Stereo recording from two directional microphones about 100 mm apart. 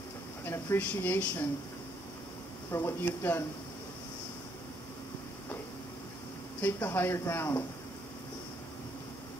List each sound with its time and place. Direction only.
0.5 s speech: 20° left (ahead or behind)
2.7 s speech: 25° left (ahead or behind)
6.6 s speech: 20° left (ahead or behind)